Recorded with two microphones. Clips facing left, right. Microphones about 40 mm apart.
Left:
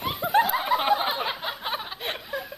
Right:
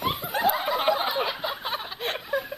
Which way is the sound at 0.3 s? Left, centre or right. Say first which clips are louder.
Left 4 dB; left.